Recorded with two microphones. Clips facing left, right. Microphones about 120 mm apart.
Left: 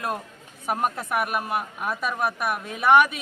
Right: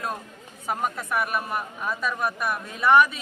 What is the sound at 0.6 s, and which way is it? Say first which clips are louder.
Speech: left 2 dB; 15° left (ahead or behind).